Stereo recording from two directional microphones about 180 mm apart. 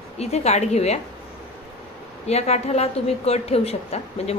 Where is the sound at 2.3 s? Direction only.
35° left (ahead or behind).